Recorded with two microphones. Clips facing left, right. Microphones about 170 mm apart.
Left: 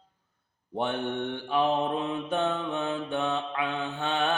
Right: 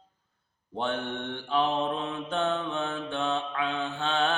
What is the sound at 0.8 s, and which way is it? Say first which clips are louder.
Mantra: left 2 dB; 15° left (ahead or behind).